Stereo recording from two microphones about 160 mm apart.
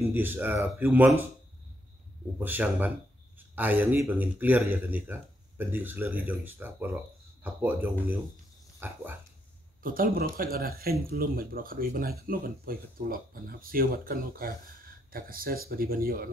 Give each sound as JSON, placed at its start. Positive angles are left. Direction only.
{"t": 0.0, "sound": "speech", "side_deg": -10}
{"t": 2.3, "sound": "speech", "side_deg": -10}
{"t": 8.7, "sound": "dog", "side_deg": -15}
{"t": 9.8, "sound": "speech", "side_deg": -65}